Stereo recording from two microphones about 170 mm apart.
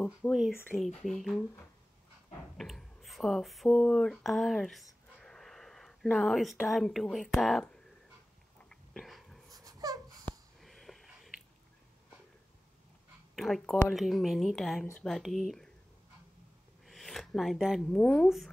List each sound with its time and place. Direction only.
0.0 s speech: 10° left (ahead or behind)
2.5 s speech: centre (ahead or behind)
8.6 s a sound: centre (ahead or behind)
9.5 s a sound: 20° right (ahead or behind)
10.6 s sniff: centre (ahead or behind)
13.4 s speech: centre (ahead or behind)
16.8 s speech: centre (ahead or behind)